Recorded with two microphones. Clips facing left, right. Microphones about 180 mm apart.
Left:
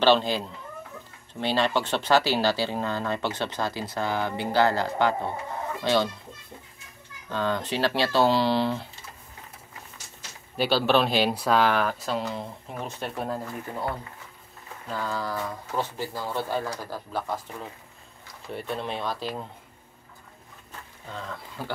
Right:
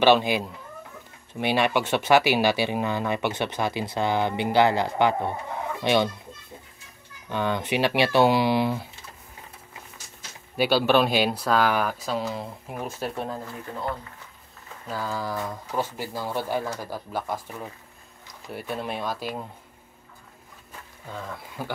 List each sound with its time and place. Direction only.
0.0 s speech: 15° right (ahead or behind)
1.4 s speech: 15° right (ahead or behind)
7.2 s speech: 15° right (ahead or behind)
10.6 s speech: 5° right (ahead or behind)
11.2 s speech: 5° left (ahead or behind)
14.9 s speech: 10° right (ahead or behind)
21.1 s speech: 10° right (ahead or behind)